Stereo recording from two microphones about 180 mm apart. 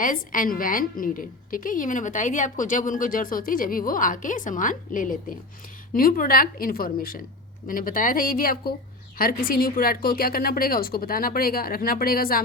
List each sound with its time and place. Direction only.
0.0 s a woman's voice: 50° left (ahead or behind)